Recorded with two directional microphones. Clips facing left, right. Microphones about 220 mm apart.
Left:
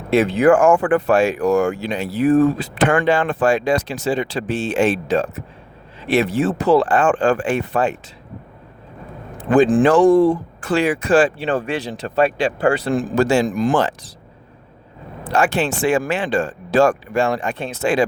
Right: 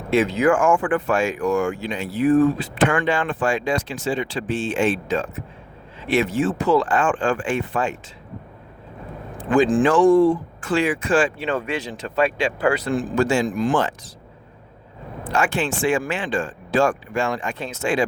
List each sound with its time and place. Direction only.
0.2 s speech: 55° left (ahead or behind)
0.5 s speech: 40° left (ahead or behind)
9.9 s speech: 40° left (ahead or behind)
12.9 s speech: 40° left (ahead or behind)
15.2 s speech: 35° left (ahead or behind)
16.1 s speech: 65° left (ahead or behind)
16.5 s speech: 40° left (ahead or behind)
17.3 s speech: 60° left (ahead or behind)